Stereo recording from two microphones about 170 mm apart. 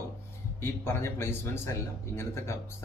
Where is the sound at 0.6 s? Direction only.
15° left (ahead or behind).